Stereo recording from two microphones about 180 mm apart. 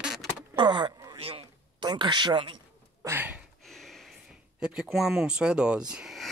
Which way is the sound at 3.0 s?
15° right (ahead or behind).